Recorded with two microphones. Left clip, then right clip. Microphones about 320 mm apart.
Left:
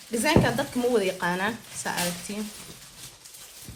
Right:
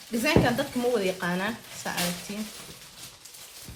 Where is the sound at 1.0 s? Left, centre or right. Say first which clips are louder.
Left 2 dB; left.